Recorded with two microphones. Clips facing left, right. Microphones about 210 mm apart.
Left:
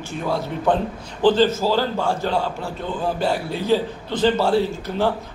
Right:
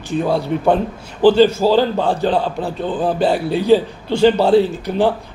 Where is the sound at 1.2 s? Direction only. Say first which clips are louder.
Right 5 dB; 10° right (ahead or behind).